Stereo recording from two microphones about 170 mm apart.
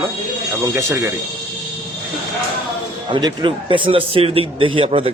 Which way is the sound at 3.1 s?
25° right (ahead or behind).